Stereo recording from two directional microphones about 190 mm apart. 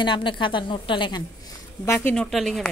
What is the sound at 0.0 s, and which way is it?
Speech, 25° left (ahead or behind).